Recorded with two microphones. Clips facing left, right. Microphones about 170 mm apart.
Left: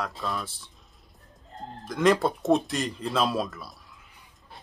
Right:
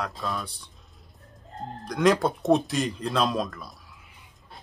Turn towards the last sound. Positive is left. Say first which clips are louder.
# right 1 dB
turn(degrees=0)  # may be behind; listen again after turning